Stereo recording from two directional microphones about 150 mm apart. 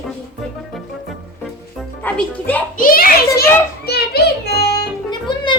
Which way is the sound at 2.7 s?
70° left (ahead or behind).